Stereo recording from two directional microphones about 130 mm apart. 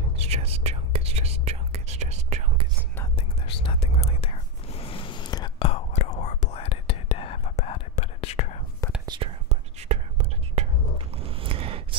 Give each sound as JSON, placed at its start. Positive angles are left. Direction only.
{"t": 0.2, "sound": "whispering", "side_deg": -50}
{"t": 3.6, "sound": "whispering", "side_deg": 50}
{"t": 5.6, "sound": "whispering", "side_deg": 55}
{"t": 9.0, "sound": "whispering", "side_deg": -35}
{"t": 9.5, "sound": "whispering", "side_deg": -60}
{"t": 11.1, "sound": "a sound", "side_deg": -45}